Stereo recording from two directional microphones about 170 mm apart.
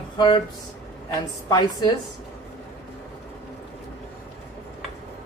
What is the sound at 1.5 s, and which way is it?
Speech, 20° left (ahead or behind).